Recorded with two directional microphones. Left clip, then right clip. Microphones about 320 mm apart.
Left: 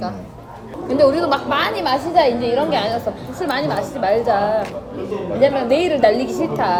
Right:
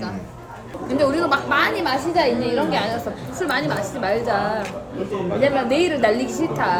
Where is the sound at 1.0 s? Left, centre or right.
Centre.